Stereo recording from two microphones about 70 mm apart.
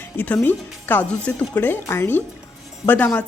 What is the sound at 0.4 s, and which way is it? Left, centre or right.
Speech, left.